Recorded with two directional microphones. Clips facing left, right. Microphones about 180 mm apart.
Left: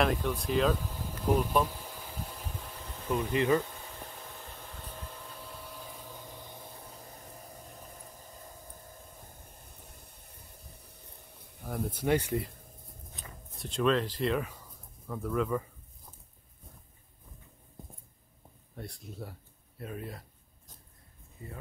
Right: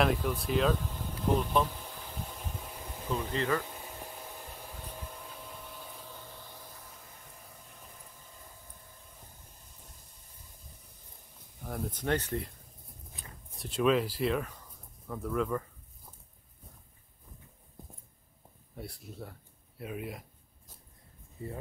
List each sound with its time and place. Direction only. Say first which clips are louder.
0.0 s speech: even; 5° right (ahead or behind)
3.1 s speech: left 4 dB; 20° left (ahead or behind)
4.5 s vacuum cleaner: right 1 dB; centre (ahead or behind)
6.1 s a sound: left 2 dB; 15° left (ahead or behind)
9.6 s a sound: left 4 dB; 60° left (ahead or behind)
11.6 s speech: left 3 dB; centre (ahead or behind)
13.6 s speech: right 1 dB; 5° right (ahead or behind)
18.8 s speech: left 1 dB; 5° right (ahead or behind)